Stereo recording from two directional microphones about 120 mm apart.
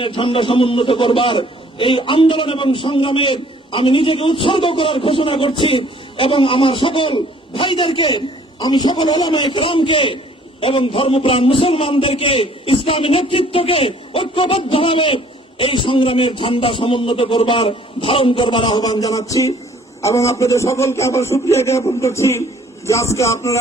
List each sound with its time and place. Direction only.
0.0 s a man's voice: 45° left (ahead or behind); by 23.6 s 25° left (ahead or behind)